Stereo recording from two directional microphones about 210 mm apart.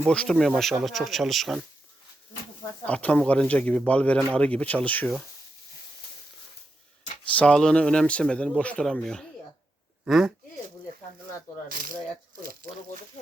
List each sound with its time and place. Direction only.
0.1 s speech: 5° left (ahead or behind)
2.8 s speech: 5° left (ahead or behind)
7.3 s speech: 5° left (ahead or behind)
11.7 s speech: 40° right (ahead or behind)